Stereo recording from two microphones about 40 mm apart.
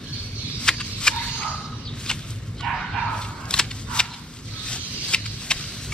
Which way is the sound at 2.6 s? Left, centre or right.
Centre.